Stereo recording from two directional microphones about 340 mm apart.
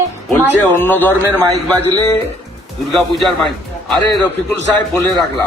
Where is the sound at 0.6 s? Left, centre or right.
Centre.